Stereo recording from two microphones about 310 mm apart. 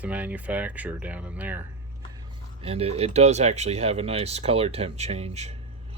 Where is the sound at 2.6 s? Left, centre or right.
Centre.